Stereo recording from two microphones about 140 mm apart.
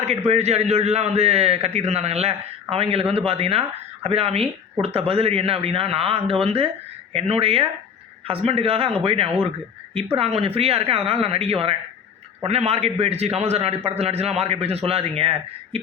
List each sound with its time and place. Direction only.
0.3 s a man's voice: 50° right (ahead or behind)